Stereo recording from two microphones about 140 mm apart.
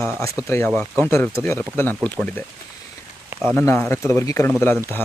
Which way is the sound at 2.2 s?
10° left (ahead or behind).